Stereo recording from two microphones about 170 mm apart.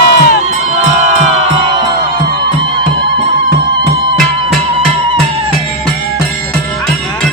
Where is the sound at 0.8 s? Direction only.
45° right (ahead or behind).